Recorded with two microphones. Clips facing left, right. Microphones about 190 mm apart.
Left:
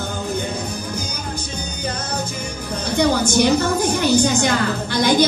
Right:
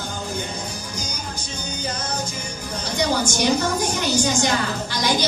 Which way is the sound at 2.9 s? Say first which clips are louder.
Left 5 dB; 60° left (ahead or behind).